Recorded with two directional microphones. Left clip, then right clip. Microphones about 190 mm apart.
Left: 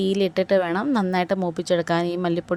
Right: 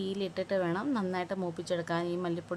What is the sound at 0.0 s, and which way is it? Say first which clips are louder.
Speech: left 13 dB; 35° left (ahead or behind).